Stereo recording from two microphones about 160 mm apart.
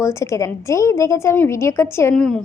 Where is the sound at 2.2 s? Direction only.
5° left (ahead or behind).